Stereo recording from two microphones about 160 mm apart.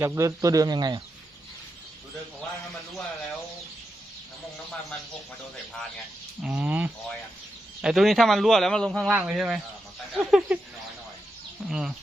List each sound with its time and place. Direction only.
0.0 s speech: 15° right (ahead or behind)
6.4 s a man's voice: 10° right (ahead or behind)
11.7 s a man's voice: 5° right (ahead or behind)